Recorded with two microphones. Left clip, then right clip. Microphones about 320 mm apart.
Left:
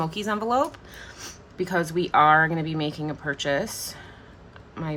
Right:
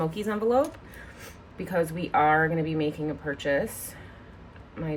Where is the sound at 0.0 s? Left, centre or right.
Centre.